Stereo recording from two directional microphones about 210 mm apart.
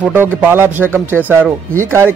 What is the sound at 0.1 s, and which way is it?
Speech, 10° right (ahead or behind).